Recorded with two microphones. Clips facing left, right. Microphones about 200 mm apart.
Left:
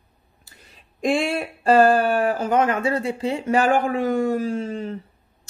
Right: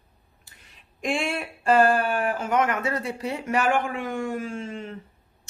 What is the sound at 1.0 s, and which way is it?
Speech, 35° left (ahead or behind).